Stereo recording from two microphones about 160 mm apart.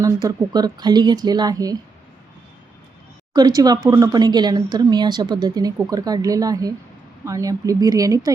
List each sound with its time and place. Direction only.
0.0 s speech: 25° right (ahead or behind)
3.3 s speech: 25° right (ahead or behind)